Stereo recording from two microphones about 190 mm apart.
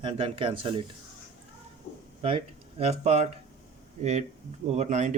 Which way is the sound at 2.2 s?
30° right (ahead or behind).